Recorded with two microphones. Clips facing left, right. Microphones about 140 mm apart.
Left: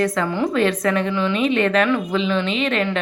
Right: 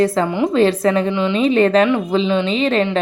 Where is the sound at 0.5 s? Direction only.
30° right (ahead or behind).